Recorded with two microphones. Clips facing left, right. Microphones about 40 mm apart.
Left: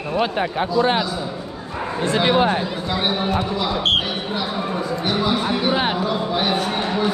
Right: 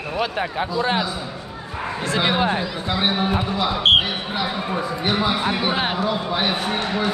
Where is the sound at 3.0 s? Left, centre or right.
Centre.